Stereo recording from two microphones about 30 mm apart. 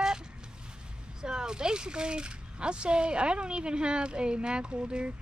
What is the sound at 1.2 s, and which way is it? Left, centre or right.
Speech, right.